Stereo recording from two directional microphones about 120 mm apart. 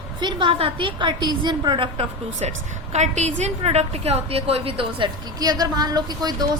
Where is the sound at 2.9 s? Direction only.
75° right (ahead or behind).